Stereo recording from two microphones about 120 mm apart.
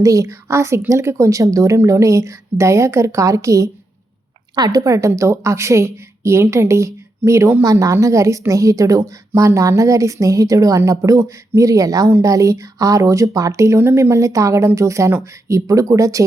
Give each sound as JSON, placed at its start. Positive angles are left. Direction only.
{"t": 0.0, "sound": "a woman's voice", "side_deg": -25}